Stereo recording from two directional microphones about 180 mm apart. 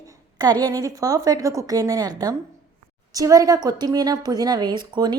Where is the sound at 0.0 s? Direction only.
20° right (ahead or behind).